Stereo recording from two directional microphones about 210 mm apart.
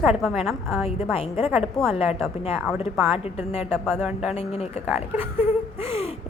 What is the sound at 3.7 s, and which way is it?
Speech, 5° left (ahead or behind).